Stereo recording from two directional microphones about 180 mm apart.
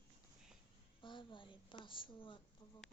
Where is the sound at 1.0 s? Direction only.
25° left (ahead or behind).